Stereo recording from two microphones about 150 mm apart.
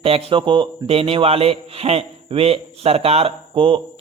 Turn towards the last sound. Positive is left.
turn(degrees=-35)  # may be behind; listen again after turning